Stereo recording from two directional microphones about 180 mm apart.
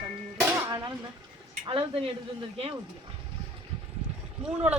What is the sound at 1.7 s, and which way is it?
Speech, 30° right (ahead or behind).